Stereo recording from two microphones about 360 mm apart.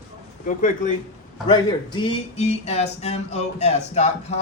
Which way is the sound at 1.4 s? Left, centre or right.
Centre.